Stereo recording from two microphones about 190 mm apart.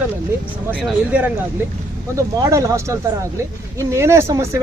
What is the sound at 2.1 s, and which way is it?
Speech, 15° right (ahead or behind).